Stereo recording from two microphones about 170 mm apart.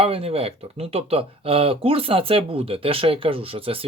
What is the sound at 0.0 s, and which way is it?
Speech, 35° right (ahead or behind).